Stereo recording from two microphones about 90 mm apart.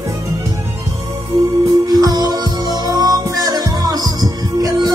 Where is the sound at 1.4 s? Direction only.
35° right (ahead or behind).